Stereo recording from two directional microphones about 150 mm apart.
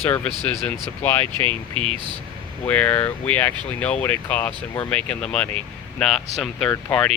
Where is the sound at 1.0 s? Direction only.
15° left (ahead or behind).